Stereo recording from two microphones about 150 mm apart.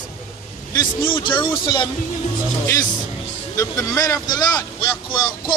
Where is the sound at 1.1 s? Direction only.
35° left (ahead or behind).